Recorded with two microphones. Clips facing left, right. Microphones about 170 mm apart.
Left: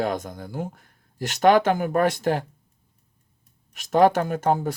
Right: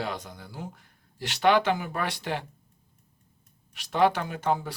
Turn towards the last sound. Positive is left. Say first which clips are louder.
# left 6 dB
turn(degrees=45)  # may be behind; listen again after turning